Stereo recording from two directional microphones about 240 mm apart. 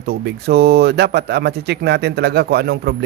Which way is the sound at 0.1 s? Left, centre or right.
Right.